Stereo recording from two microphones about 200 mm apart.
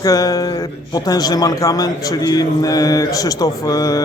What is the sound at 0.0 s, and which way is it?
A man's voice, 15° left (ahead or behind).